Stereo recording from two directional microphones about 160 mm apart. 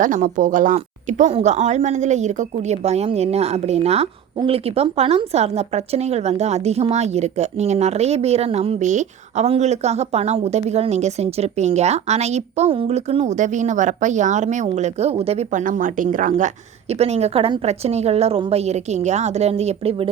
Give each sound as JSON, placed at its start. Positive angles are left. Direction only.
{"t": 0.0, "sound": "speech", "side_deg": -55}
{"t": 1.3, "sound": "speech", "side_deg": -40}
{"t": 17.0, "sound": "a woman's voice", "side_deg": -40}